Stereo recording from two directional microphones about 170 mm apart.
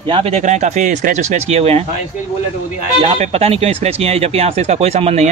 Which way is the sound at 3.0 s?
35° right (ahead or behind).